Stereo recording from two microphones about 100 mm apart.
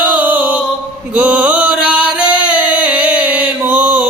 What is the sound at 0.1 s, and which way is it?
Music, 15° right (ahead or behind).